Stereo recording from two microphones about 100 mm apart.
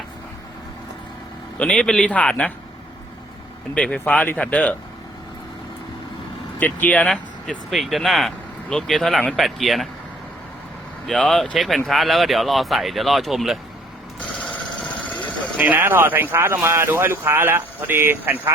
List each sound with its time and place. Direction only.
1.5 s a man's voice: 10° left (ahead or behind)
3.8 s a man's voice: 10° left (ahead or behind)
6.6 s speech: 15° left (ahead or behind); by 9.9 s centre (ahead or behind)
11.0 s speech: 5° left (ahead or behind)
15.0 s vehicle: 15° left (ahead or behind)
15.5 s speech: 20° right (ahead or behind)